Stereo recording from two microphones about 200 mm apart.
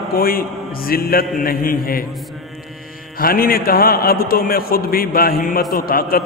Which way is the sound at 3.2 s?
45° left (ahead or behind).